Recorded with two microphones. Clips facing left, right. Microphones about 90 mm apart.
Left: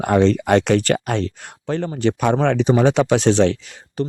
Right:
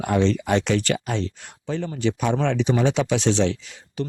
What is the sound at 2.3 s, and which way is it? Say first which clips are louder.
Speech: left 5 dB; 45° left (ahead or behind).